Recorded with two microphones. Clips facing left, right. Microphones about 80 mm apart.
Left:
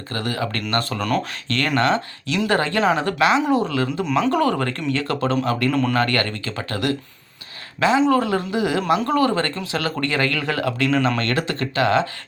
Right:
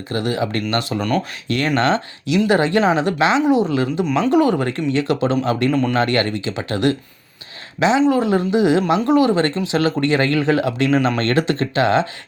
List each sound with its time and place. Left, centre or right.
0.1 s speech: centre
3.4 s speech: centre
3.7 s speech: right